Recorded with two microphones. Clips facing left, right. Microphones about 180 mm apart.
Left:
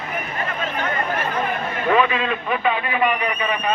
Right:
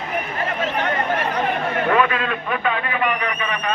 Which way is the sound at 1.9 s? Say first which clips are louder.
Left 2 dB; centre (ahead or behind).